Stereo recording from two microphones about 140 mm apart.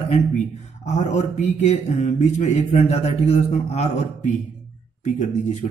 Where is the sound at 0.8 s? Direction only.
55° left (ahead or behind).